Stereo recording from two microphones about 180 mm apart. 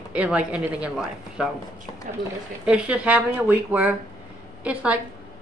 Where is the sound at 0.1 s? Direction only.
5° right (ahead or behind).